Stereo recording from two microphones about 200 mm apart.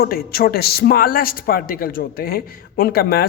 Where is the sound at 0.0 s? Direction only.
50° left (ahead or behind).